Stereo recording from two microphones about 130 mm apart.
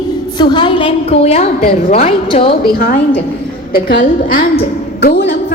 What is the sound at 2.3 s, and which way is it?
Speech, 45° left (ahead or behind).